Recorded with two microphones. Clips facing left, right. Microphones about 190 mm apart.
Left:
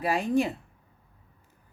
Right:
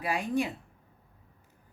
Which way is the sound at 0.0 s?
40° left (ahead or behind).